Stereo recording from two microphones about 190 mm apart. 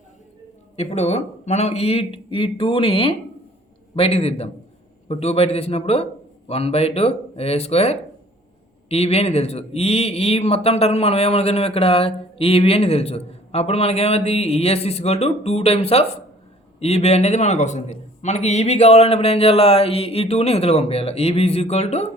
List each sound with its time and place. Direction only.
0.8 s speech: 35° left (ahead or behind)